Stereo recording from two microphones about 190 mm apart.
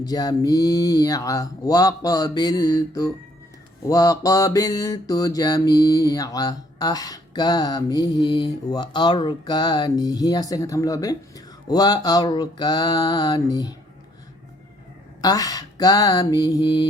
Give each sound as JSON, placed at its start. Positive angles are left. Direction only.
{"t": 0.0, "sound": "mantra", "side_deg": 20}
{"t": 15.2, "sound": "mantra", "side_deg": 20}